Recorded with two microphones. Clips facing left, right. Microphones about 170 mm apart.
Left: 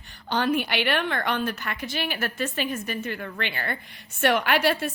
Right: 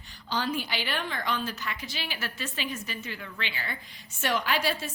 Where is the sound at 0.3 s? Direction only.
60° left (ahead or behind).